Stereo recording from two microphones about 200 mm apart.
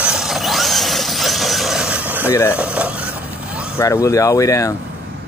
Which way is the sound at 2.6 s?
5° right (ahead or behind).